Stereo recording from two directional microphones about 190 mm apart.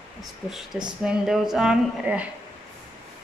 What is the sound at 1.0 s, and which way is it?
Speech, centre (ahead or behind).